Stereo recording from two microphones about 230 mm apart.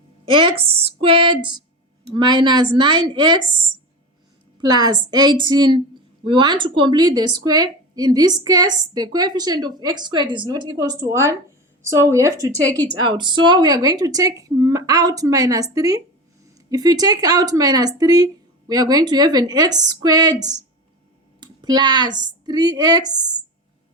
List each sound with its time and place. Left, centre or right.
0.3 s a woman's voice: right
4.6 s a woman's voice: centre